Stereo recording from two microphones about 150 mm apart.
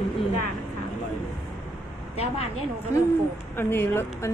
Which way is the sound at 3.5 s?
15° left (ahead or behind).